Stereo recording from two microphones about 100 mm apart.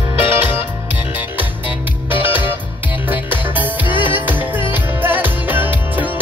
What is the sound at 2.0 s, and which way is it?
Music, 20° right (ahead or behind).